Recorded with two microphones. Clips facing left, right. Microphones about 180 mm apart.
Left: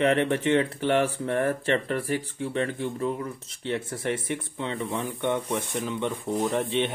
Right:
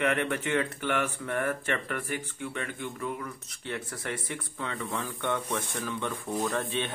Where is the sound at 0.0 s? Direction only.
30° left (ahead or behind).